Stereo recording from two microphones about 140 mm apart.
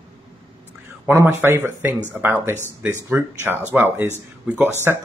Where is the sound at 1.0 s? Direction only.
15° right (ahead or behind).